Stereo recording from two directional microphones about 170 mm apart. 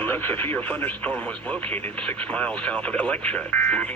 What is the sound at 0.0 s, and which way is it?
Speech, 10° left (ahead or behind).